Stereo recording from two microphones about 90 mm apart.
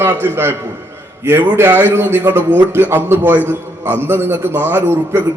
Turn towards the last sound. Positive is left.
turn(degrees=-25)  # may be behind; listen again after turning